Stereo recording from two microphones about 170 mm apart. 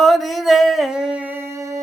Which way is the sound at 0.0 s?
Centre (ahead or behind).